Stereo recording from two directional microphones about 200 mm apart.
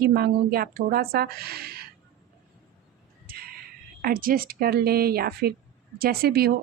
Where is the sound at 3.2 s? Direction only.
50° right (ahead or behind).